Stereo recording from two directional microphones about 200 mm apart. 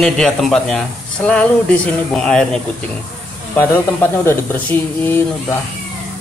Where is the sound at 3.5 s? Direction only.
10° left (ahead or behind).